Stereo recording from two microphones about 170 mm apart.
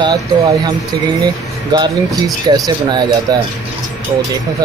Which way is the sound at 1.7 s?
25° right (ahead or behind).